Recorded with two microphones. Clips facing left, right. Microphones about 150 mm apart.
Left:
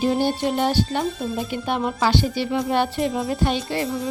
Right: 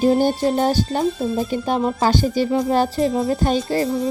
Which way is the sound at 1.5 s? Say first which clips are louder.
Right 4 dB; 40° right (ahead or behind).